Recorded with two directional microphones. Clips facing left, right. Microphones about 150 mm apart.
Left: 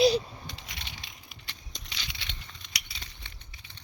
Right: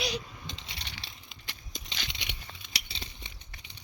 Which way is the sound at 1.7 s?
5° right (ahead or behind).